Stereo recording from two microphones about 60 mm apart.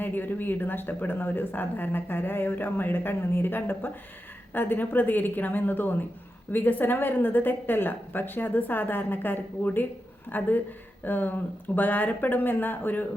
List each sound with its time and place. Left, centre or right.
0.0 s speech: left